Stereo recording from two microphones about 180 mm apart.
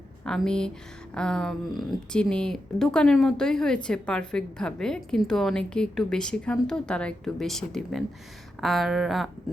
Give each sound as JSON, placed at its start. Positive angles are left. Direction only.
{"t": 0.3, "sound": "a woman's voice", "side_deg": 5}